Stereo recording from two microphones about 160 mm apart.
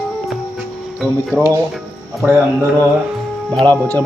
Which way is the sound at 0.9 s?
5° right (ahead or behind).